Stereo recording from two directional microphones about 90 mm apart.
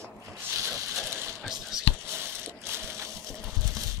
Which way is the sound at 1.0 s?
30° right (ahead or behind).